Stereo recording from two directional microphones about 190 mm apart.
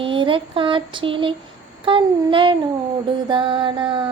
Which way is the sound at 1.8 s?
25° right (ahead or behind).